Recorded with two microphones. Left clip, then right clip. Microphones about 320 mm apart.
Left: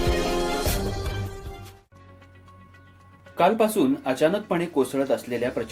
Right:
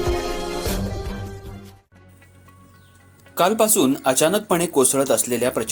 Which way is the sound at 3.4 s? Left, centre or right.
Right.